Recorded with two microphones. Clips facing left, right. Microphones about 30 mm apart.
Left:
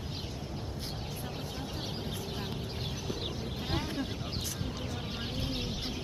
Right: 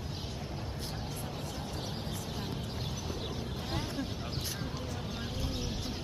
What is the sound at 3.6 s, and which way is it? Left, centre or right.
Vehicle, left.